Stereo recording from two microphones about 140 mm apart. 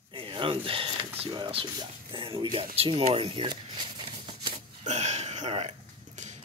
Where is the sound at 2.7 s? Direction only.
45° right (ahead or behind).